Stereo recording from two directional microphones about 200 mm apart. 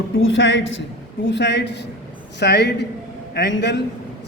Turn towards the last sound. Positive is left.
turn(degrees=60)  # may be behind; listen again after turning